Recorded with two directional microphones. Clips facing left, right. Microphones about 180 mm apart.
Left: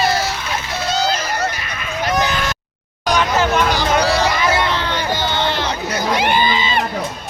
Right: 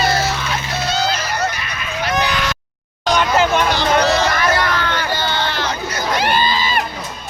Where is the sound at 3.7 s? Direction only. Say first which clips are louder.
Right 1 dB; 10° left (ahead or behind).